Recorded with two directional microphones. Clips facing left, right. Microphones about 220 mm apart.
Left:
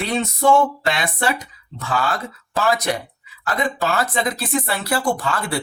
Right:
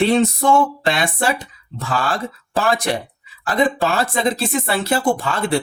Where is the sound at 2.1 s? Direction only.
30° right (ahead or behind).